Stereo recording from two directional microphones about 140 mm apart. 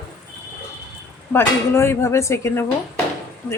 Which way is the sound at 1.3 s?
20° left (ahead or behind).